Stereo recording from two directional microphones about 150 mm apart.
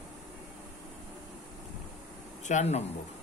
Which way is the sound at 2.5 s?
50° left (ahead or behind).